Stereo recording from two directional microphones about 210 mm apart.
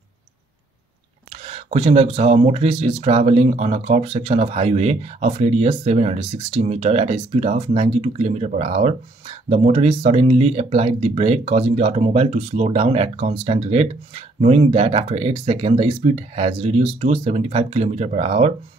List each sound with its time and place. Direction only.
1.3 s speech: 30° right (ahead or behind)